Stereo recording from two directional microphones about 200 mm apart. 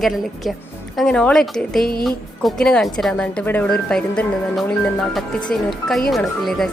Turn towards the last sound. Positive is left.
turn(degrees=0)  # may be behind; listen again after turning